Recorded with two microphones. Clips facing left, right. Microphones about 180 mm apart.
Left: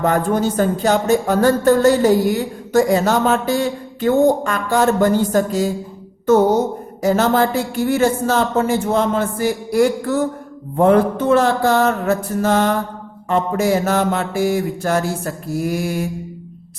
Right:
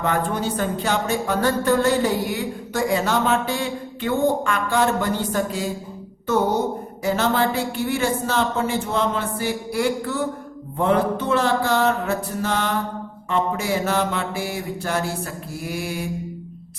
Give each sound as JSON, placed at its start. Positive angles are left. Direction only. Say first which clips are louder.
{"t": 0.0, "sound": "speech", "louder": "left 6 dB", "side_deg": 45}